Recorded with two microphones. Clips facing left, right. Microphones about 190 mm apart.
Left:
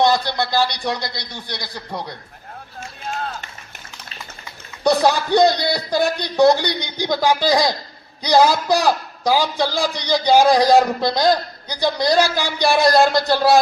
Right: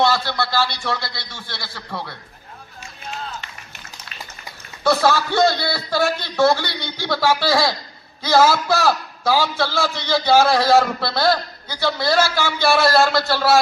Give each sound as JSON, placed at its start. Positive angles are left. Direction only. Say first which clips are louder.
{"t": 0.0, "sound": "a man's voice", "louder": "left 2 dB", "side_deg": 15}
{"t": 3.1, "sound": "run", "louder": "left 4 dB", "side_deg": 50}
{"t": 4.8, "sound": "a man's voice", "louder": "left 1 dB", "side_deg": 15}